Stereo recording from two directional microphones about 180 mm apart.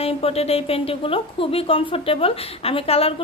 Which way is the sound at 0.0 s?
35° left (ahead or behind).